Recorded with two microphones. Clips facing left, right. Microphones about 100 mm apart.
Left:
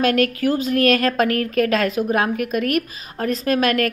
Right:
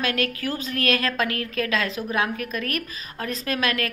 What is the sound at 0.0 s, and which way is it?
Speech, 45° left (ahead or behind).